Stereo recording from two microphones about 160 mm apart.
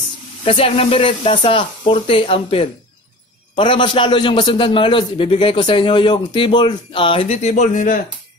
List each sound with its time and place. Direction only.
0.4 s a man's voice: 35° left (ahead or behind); by 8.0 s 55° left (ahead or behind)